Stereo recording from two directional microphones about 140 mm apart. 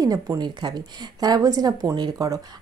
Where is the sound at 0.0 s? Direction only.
25° right (ahead or behind).